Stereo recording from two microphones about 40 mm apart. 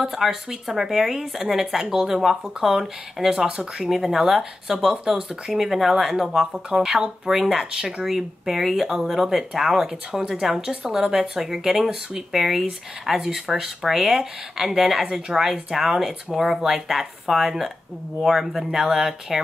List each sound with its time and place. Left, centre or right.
0.0 s speech: centre
3.8 s speech: centre
8.0 s speech: centre